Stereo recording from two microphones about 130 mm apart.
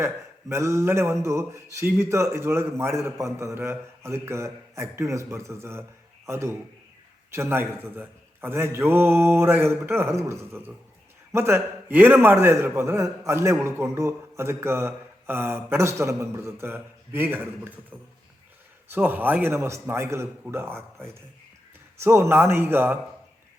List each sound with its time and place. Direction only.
0.0 s a man's voice: 20° right (ahead or behind)
18.9 s a man's voice: 15° right (ahead or behind)